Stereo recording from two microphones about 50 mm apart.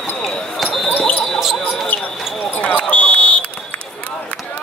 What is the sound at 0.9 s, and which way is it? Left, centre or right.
Basketball bounce, left.